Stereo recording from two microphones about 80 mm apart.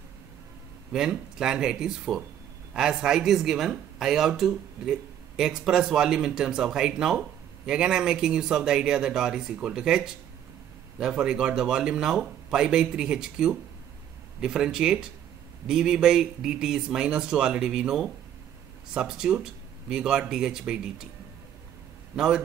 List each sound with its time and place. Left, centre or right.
0.9 s speech: centre
22.1 s a man's voice: centre